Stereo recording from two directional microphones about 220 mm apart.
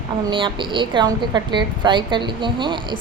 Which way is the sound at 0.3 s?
20° right (ahead or behind).